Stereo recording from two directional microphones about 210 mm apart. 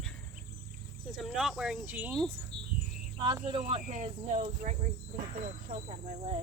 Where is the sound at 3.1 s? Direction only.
20° right (ahead or behind).